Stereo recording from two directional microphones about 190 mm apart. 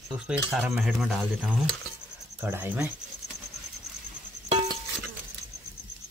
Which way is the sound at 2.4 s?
10° right (ahead or behind).